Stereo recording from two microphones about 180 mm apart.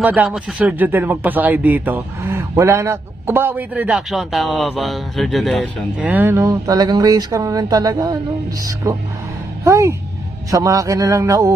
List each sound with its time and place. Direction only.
0.0 s speech: 5° right (ahead or behind)
5.9 s speech: 10° right (ahead or behind)